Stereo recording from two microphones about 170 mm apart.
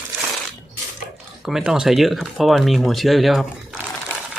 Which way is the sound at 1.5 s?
5° right (ahead or behind).